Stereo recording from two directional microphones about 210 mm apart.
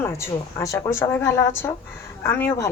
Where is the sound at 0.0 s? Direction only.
15° left (ahead or behind).